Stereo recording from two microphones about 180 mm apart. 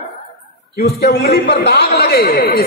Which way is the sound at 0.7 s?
65° left (ahead or behind).